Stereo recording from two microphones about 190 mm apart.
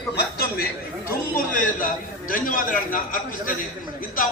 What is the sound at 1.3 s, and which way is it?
A man's voice, 45° left (ahead or behind).